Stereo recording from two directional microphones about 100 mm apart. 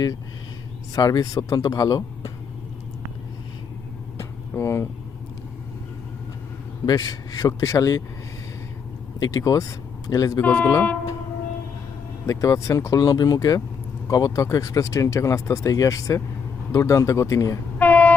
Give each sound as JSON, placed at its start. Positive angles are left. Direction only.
{"t": 0.9, "sound": "speech", "side_deg": 35}
{"t": 4.2, "sound": "vehicle", "side_deg": 30}
{"t": 6.8, "sound": "speech", "side_deg": 40}
{"t": 9.1, "sound": "speech", "side_deg": 35}
{"t": 10.4, "sound": "speech", "side_deg": 20}
{"t": 12.2, "sound": "speech", "side_deg": 30}
{"t": 17.7, "sound": "a sound", "side_deg": 15}